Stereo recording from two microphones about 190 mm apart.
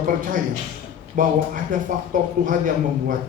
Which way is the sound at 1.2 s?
45° right (ahead or behind).